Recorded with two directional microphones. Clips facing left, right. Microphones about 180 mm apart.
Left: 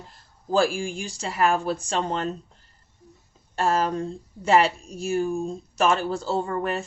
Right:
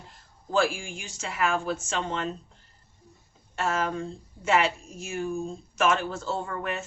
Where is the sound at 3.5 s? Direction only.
35° left (ahead or behind).